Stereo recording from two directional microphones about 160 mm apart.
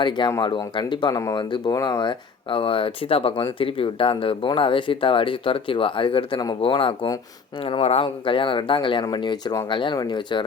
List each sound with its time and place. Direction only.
0.0 s speech: 25° left (ahead or behind)